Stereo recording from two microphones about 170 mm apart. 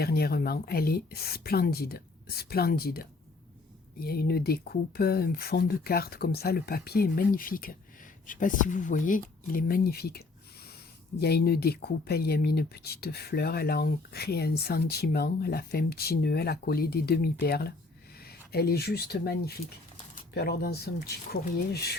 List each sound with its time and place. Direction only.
0.0 s speech: 65° left (ahead or behind)
4.0 s speech: 65° left (ahead or behind)